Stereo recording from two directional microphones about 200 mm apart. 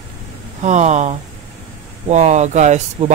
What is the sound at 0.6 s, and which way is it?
Speech, 35° right (ahead or behind).